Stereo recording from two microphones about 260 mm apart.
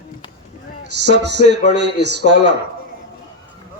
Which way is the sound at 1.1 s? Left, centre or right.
Right.